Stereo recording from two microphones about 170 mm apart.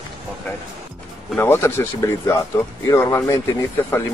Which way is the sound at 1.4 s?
15° left (ahead or behind).